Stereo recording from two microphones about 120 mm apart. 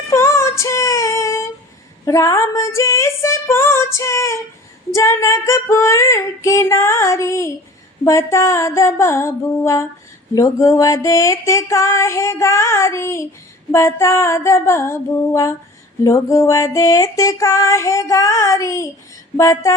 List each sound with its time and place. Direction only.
0.1 s female singing: 25° left (ahead or behind)